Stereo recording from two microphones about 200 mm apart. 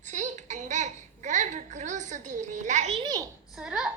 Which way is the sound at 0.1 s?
35° right (ahead or behind).